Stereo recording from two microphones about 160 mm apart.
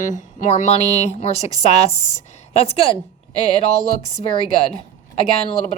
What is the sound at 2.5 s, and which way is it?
Speech, 40° left (ahead or behind).